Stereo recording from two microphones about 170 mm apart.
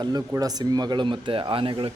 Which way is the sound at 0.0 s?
20° right (ahead or behind).